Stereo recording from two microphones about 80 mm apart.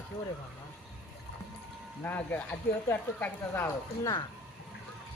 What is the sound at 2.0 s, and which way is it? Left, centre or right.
Speech, left.